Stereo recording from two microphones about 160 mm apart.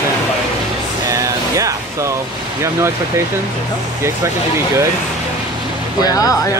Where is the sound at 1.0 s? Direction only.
20° right (ahead or behind).